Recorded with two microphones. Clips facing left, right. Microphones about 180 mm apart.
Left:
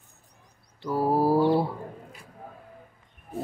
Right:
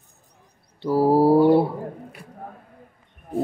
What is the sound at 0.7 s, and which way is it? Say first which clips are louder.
Mantra: right 7 dB; 30° right (ahead or behind).